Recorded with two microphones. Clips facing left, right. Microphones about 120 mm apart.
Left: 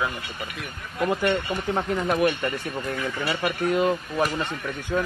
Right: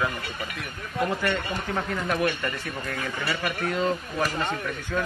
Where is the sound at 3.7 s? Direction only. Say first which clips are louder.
Left 3 dB; 15° left (ahead or behind).